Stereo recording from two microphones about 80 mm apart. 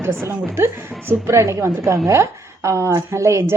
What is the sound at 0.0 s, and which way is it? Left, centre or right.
A woman's voice, right.